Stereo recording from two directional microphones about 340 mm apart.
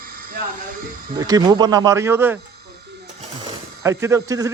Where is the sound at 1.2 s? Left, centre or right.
Centre.